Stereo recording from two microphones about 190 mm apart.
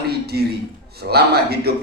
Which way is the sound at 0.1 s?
55° right (ahead or behind).